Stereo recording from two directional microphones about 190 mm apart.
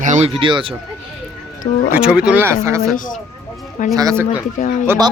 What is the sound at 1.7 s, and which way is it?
Speech, 40° left (ahead or behind).